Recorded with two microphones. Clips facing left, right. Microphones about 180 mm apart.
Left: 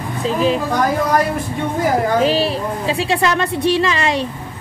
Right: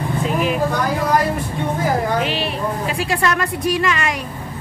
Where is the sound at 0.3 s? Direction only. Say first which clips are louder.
Left 5 dB; 30° left (ahead or behind).